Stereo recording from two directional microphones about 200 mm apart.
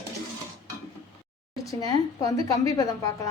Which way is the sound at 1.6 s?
20° left (ahead or behind).